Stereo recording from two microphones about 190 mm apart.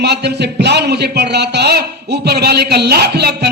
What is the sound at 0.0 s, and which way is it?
A man's voice, 60° right (ahead or behind).